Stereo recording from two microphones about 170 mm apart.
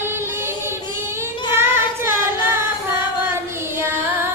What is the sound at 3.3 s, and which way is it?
Music, 15° right (ahead or behind).